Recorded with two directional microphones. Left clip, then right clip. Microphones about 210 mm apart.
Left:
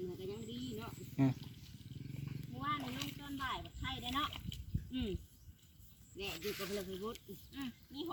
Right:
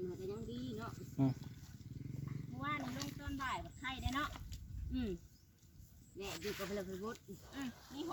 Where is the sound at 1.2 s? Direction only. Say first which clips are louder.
Left 2 dB; 15° left (ahead or behind).